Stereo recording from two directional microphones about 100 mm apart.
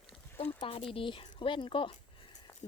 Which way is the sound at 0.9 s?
55° left (ahead or behind).